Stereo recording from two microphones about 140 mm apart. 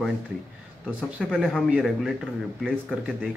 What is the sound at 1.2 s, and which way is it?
Speech, 5° left (ahead or behind).